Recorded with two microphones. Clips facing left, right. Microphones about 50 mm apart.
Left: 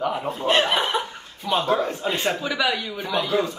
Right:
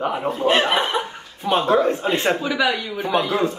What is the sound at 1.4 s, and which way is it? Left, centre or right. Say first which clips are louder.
Speech: right 4 dB; right.